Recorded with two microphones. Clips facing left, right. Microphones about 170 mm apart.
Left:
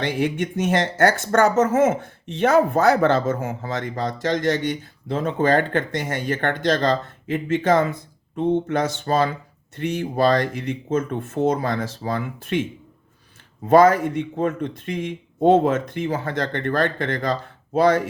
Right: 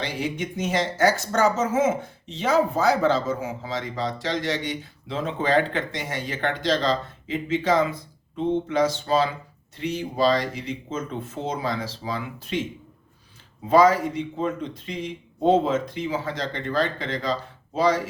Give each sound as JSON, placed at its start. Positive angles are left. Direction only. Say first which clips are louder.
{"t": 0.0, "sound": "speech", "louder": "left 6 dB", "side_deg": 55}
{"t": 13.7, "sound": "speech", "louder": "left 3 dB", "side_deg": 50}